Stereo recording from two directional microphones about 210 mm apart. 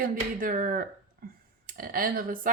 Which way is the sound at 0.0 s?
40° right (ahead or behind).